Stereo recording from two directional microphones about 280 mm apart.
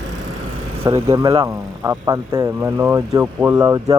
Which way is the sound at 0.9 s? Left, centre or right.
Centre.